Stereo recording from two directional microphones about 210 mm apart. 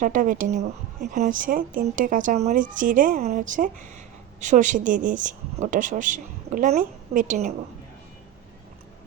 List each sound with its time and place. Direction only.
0.0 s speech: 40° right (ahead or behind)